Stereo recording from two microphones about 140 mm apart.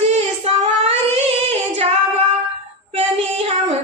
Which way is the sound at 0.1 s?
50° right (ahead or behind).